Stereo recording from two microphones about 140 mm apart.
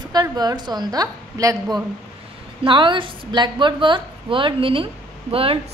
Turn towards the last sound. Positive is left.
turn(degrees=-40)  # may be behind; listen again after turning